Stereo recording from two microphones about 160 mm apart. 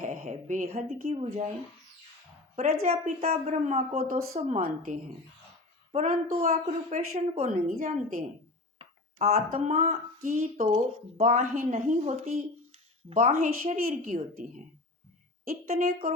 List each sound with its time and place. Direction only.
0.0 s a woman's voice: 50° right (ahead or behind)
2.6 s a woman's voice: 45° right (ahead or behind)